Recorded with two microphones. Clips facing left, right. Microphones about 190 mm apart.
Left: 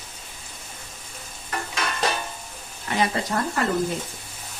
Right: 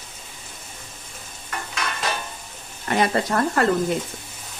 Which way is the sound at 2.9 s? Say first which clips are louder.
Right 3 dB; 55° right (ahead or behind).